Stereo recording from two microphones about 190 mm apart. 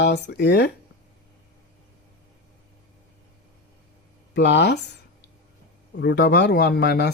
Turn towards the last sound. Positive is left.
turn(degrees=60)  # may be behind; listen again after turning